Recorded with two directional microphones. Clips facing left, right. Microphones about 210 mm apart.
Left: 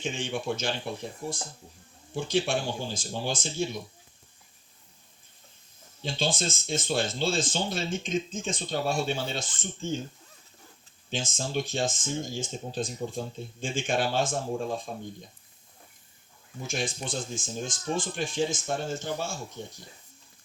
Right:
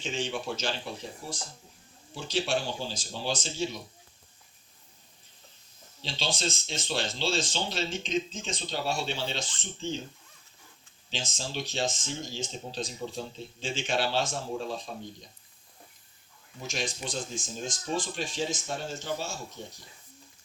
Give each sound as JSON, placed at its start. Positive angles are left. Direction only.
{"t": 0.0, "sound": "speech", "side_deg": 55}
{"t": 2.1, "sound": "speech", "side_deg": 55}
{"t": 6.0, "sound": "speech", "side_deg": 50}
{"t": 11.1, "sound": "speech", "side_deg": 50}
{"t": 16.6, "sound": "speech", "side_deg": 50}